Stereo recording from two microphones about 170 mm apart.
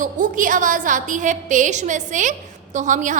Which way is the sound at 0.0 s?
50° right (ahead or behind).